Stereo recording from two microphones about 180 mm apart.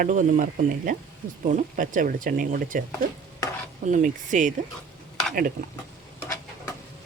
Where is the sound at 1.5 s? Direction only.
45° right (ahead or behind).